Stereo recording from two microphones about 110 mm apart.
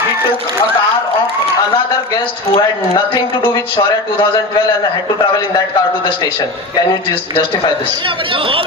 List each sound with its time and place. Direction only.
3.5 s speech: 45° left (ahead or behind)
8.0 s speech: 55° right (ahead or behind)